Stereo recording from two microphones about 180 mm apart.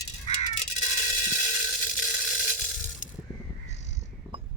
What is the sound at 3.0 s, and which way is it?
Mechanisms, 45° left (ahead or behind).